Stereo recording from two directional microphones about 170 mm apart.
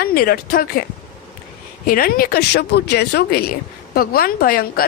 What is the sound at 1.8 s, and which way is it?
Speech, 60° left (ahead or behind).